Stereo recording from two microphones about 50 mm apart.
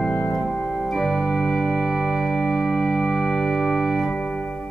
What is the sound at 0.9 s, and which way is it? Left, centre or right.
Organ, centre.